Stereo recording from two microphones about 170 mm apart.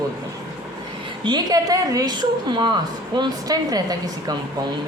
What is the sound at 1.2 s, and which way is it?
A woman's voice, 25° right (ahead or behind).